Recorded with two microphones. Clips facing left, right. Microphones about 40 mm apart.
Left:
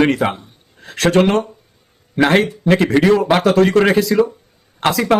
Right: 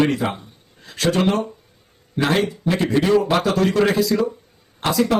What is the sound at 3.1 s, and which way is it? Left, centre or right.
Speech, left.